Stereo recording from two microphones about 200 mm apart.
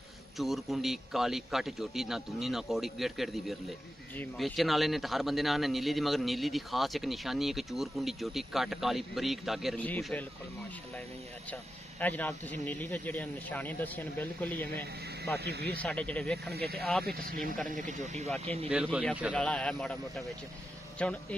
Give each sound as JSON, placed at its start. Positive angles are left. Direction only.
{"t": 0.4, "sound": "a man's voice", "side_deg": 0}
{"t": 11.5, "sound": "speech", "side_deg": 10}
{"t": 15.3, "sound": "speech", "side_deg": -55}
{"t": 15.8, "sound": "speech", "side_deg": 5}
{"t": 16.5, "sound": "speech", "side_deg": -50}
{"t": 18.7, "sound": "a man's voice", "side_deg": -5}